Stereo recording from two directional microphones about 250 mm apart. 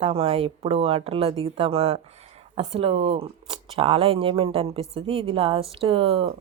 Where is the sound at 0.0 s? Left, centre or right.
Right.